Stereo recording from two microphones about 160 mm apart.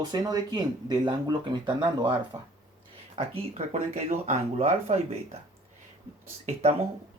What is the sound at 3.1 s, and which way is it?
Speech, 40° right (ahead or behind).